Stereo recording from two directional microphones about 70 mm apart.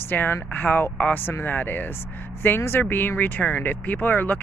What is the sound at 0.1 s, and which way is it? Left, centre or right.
Speech, left.